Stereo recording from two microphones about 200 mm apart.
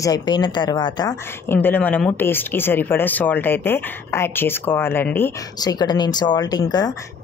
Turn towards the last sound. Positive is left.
turn(degrees=20)  # may be behind; listen again after turning